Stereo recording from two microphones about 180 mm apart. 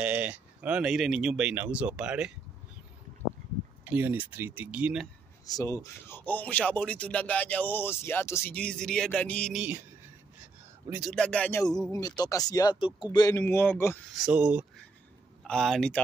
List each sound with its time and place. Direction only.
0.0 s speech: 5° right (ahead or behind)
3.8 s speech: 10° right (ahead or behind)
5.5 s speech: 20° left (ahead or behind)
10.9 s speech: centre (ahead or behind)
11.9 s speech: 20° left (ahead or behind)
14.1 s speech: 5° right (ahead or behind)